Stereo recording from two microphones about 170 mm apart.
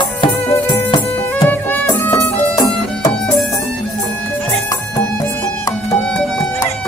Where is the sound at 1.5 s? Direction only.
10° left (ahead or behind).